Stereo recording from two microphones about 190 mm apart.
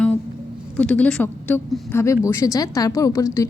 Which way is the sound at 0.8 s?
5° left (ahead or behind).